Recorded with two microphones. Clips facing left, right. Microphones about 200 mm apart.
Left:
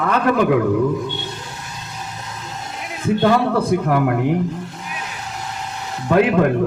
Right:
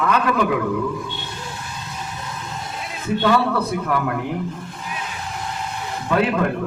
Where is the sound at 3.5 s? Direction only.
45° left (ahead or behind).